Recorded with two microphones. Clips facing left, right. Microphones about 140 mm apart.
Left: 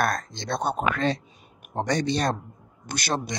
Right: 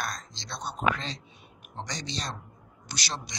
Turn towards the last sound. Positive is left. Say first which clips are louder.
# left 9 dB
turn(degrees=55)  # may be behind; listen again after turning